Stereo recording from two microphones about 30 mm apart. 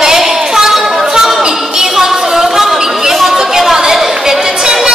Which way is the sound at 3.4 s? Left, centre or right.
Centre.